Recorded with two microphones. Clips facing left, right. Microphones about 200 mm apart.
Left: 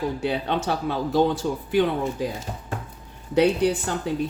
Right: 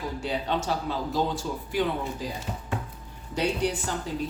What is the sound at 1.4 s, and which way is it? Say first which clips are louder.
Speech: left 6 dB; 50° left (ahead or behind).